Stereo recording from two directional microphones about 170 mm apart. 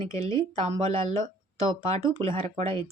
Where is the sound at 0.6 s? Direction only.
35° right (ahead or behind).